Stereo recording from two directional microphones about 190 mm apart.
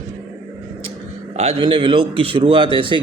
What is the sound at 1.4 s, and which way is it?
A man's voice, 30° right (ahead or behind).